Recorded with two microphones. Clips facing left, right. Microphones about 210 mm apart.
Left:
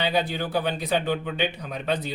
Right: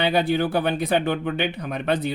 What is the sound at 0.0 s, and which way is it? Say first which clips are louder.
Speech: right 5 dB; 55° right (ahead or behind).